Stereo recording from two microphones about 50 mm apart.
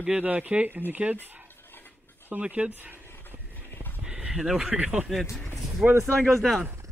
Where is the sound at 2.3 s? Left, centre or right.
Right.